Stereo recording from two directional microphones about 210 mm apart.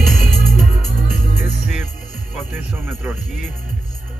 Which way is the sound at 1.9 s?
45° right (ahead or behind).